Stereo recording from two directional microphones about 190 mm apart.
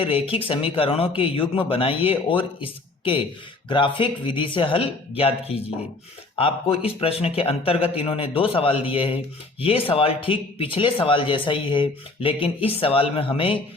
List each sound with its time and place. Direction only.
0.0 s speech: 30° left (ahead or behind)